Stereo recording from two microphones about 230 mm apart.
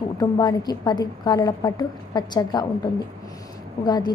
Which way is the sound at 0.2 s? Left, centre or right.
Centre.